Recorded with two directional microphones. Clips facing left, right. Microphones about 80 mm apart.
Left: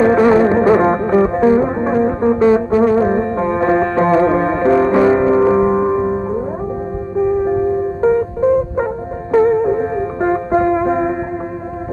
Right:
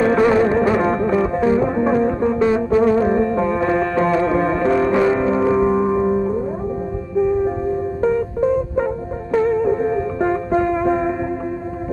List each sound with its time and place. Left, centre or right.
0.0 s music: left
2.4 s music: left